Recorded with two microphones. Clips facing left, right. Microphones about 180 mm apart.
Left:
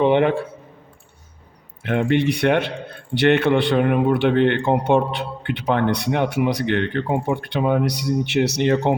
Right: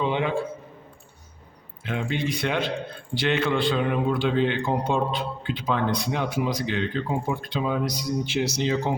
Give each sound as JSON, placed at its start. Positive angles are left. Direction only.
{"t": 0.0, "sound": "a man's voice", "side_deg": 65}
{"t": 1.8, "sound": "a man's voice", "side_deg": 65}